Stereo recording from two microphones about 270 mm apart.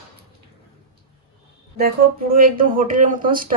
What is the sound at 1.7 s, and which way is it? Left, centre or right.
Speech, right.